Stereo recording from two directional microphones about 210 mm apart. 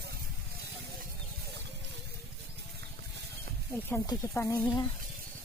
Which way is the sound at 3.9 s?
15° left (ahead or behind).